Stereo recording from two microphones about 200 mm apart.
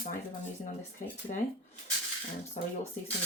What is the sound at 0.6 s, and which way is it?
Speech, 40° left (ahead or behind).